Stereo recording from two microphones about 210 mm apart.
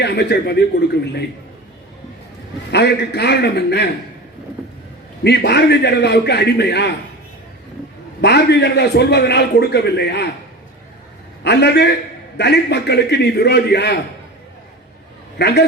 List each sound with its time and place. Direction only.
0.0 s a man's voice: 50° left (ahead or behind)
2.7 s a man's voice: 50° left (ahead or behind)
5.2 s a man's voice: 50° left (ahead or behind)
8.2 s a man's voice: 50° left (ahead or behind)
11.4 s a man's voice: 50° left (ahead or behind)
15.4 s a man's voice: 50° left (ahead or behind)